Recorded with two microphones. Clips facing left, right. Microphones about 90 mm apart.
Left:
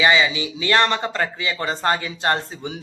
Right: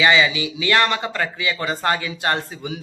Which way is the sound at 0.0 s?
25° left (ahead or behind).